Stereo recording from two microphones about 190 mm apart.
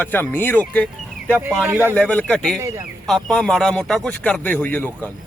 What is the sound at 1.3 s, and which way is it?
Speech, 10° right (ahead or behind).